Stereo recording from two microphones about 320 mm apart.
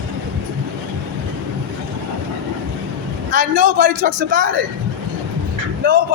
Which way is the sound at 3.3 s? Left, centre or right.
Right.